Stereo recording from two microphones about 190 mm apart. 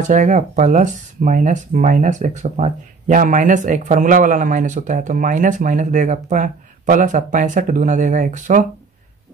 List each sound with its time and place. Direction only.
0.1 s speech: 40° right (ahead or behind)